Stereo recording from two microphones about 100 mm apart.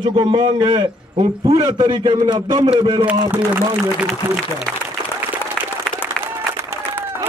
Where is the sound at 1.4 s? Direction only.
35° right (ahead or behind); by 3.1 s 55° right (ahead or behind).